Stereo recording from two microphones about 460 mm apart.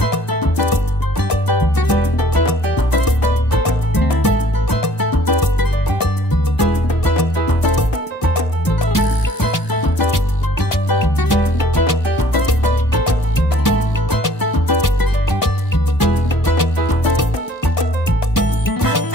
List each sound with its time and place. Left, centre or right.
1.5 s music: left
14.2 s music: left
18.3 s music: left